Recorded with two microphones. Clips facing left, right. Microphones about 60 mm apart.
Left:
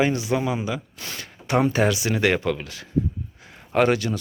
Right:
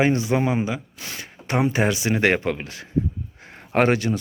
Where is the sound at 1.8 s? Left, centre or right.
Right.